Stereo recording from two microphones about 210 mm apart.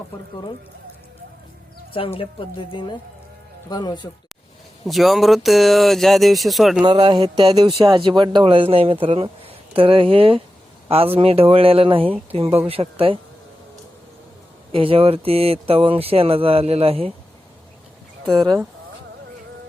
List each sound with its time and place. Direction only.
2.1 s speech: 25° left (ahead or behind)
4.9 s speech: centre (ahead or behind)
6.8 s speech: 20° right (ahead or behind)
14.7 s speech: 25° right (ahead or behind)
18.3 s speech: 20° right (ahead or behind)